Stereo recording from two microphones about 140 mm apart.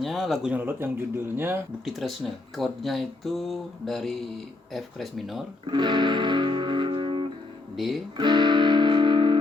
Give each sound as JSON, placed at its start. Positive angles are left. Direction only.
{"t": 0.0, "sound": "speech", "side_deg": 0}
{"t": 1.8, "sound": "a sound", "side_deg": 0}
{"t": 5.6, "sound": "music", "side_deg": -35}